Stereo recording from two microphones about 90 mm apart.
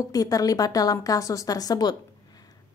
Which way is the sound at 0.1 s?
45° left (ahead or behind).